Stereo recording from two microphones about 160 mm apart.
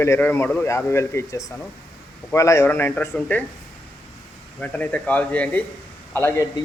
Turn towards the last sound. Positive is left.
turn(degrees=15)  # may be behind; listen again after turning